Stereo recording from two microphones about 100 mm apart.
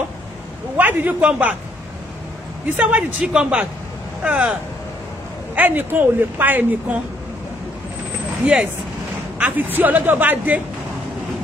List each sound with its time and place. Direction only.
0.7 s a man's voice: 15° right (ahead or behind)
2.8 s a man's voice: 15° right (ahead or behind)
5.6 s a woman's voice: 20° right (ahead or behind)
9.4 s a woman's voice: 20° right (ahead or behind)